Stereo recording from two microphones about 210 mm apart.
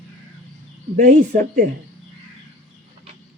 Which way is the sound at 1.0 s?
40° right (ahead or behind).